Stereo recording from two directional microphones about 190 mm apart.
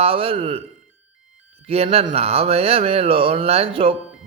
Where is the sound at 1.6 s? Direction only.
30° right (ahead or behind).